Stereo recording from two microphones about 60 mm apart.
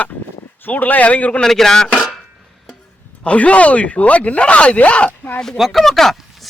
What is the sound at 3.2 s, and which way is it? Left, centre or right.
Speech, left.